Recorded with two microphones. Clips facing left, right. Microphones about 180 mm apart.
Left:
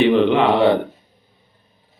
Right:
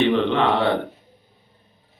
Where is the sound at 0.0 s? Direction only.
10° left (ahead or behind).